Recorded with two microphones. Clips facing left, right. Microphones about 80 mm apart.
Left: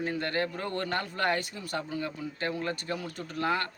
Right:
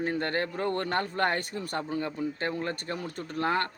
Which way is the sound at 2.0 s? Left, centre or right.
Right.